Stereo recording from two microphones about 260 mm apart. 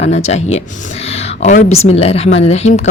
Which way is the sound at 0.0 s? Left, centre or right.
Left.